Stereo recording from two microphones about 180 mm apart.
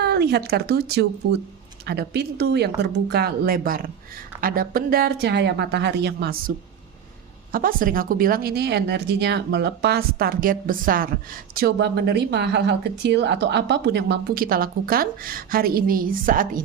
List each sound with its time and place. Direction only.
0.0 s a woman's voice: 65° right (ahead or behind)
7.5 s speech: 50° right (ahead or behind)